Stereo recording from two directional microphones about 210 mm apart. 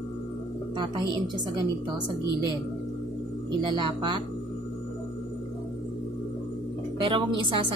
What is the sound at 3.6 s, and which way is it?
Speech, 20° right (ahead or behind).